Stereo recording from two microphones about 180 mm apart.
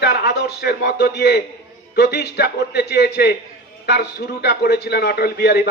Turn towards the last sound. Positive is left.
turn(degrees=65)  # may be behind; listen again after turning